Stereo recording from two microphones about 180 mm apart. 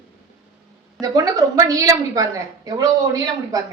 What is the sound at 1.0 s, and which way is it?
A woman's voice, 20° right (ahead or behind).